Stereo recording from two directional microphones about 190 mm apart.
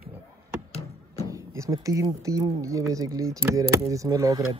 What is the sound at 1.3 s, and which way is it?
Speech, 15° right (ahead or behind).